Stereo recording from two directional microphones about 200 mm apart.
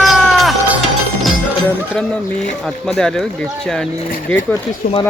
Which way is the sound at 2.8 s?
5° left (ahead or behind).